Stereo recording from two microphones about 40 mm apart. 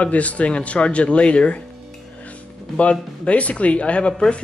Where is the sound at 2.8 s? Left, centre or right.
Left.